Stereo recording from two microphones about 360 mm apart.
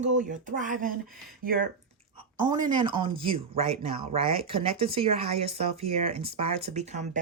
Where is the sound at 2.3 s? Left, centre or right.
Centre.